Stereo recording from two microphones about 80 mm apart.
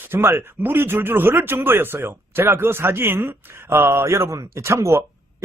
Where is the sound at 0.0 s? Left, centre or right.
Right.